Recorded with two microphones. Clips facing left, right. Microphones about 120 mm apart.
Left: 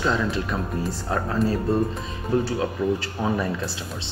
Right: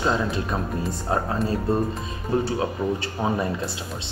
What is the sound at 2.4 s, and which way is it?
Speech, 25° right (ahead or behind).